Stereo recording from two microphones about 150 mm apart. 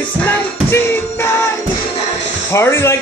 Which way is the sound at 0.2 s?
15° left (ahead or behind).